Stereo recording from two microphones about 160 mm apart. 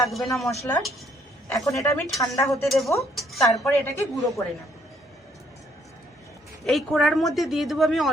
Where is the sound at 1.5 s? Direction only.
20° left (ahead or behind).